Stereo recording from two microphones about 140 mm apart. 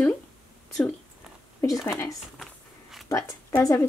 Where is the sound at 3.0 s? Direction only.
25° left (ahead or behind).